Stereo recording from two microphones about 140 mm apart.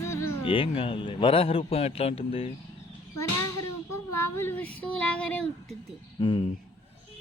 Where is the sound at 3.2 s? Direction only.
20° left (ahead or behind).